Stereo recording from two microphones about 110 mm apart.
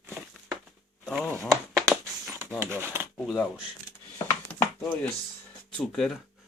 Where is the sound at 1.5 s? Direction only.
25° right (ahead or behind).